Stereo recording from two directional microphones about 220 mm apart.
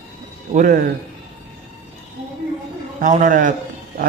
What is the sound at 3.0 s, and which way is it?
Speech, 35° right (ahead or behind).